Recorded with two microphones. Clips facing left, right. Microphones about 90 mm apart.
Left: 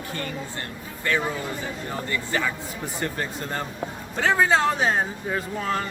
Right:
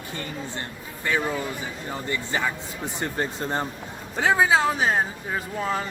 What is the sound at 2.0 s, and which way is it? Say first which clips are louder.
Speech: even; 20° right (ahead or behind).